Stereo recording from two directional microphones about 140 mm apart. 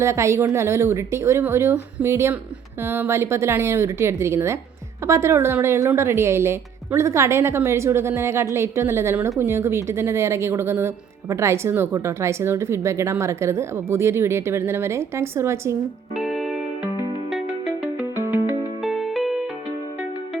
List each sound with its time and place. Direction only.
0.0 s a woman's voice: 20° right (ahead or behind)
16.1 s music: centre (ahead or behind)
18.2 s music: 15° right (ahead or behind)
18.8 s music: centre (ahead or behind)